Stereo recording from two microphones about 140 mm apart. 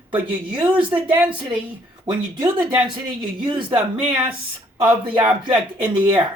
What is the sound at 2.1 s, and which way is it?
Speech, 30° right (ahead or behind).